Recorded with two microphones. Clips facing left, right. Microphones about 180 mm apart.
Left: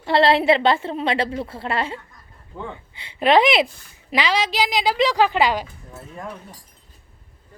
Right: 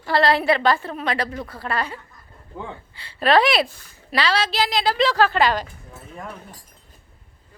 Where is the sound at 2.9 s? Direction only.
20° left (ahead or behind).